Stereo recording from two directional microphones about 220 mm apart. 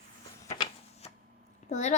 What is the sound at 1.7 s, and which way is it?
Speech, 30° left (ahead or behind).